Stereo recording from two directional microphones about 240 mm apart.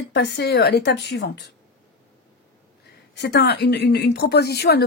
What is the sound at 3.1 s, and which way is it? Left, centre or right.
A woman's voice, left.